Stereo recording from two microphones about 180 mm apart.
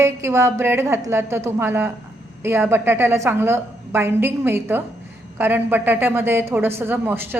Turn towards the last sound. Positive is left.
turn(degrees=-10)  # may be behind; listen again after turning